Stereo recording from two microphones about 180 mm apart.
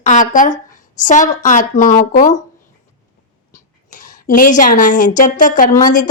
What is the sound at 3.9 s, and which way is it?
A woman's voice, 45° left (ahead or behind).